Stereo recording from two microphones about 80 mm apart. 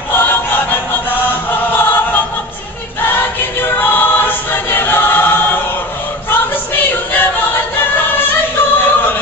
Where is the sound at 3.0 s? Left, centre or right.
Left.